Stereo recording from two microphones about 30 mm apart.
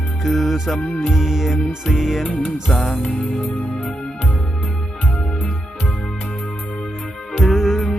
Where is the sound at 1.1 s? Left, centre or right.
Centre.